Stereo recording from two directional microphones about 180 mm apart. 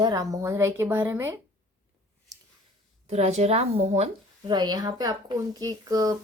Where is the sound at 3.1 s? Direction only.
35° right (ahead or behind).